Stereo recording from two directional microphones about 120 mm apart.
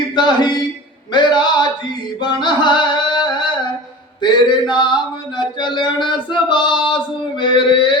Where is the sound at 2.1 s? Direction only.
40° left (ahead or behind).